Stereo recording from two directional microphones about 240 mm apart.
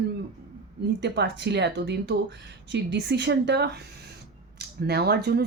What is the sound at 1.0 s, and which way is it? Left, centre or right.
Speech, right.